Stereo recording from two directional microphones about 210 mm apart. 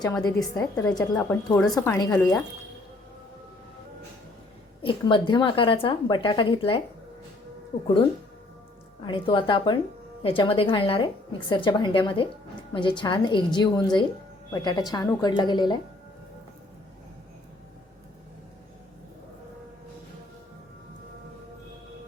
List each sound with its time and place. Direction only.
0.5 s speech: 15° left (ahead or behind)
4.8 s a woman's voice: 25° left (ahead or behind)
9.0 s a woman's voice: 25° left (ahead or behind)